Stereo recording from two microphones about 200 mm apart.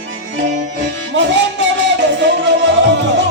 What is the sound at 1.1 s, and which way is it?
Music, 60° right (ahead or behind).